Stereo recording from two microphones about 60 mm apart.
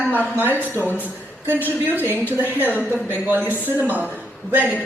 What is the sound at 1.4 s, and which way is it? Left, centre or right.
Speech, right.